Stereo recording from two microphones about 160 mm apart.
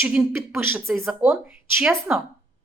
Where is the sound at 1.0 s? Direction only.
Centre (ahead or behind).